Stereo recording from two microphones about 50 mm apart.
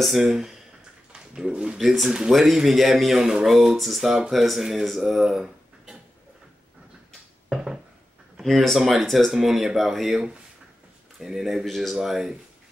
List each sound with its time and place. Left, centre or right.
0.0 s speech: centre
1.8 s speech: centre
7.4 s a sound: centre
8.4 s speech: centre